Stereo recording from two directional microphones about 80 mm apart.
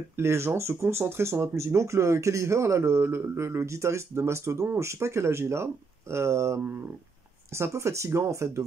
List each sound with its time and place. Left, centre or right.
0.1 s speech: right